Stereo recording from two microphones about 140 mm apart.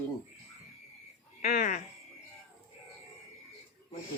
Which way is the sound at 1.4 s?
90° left.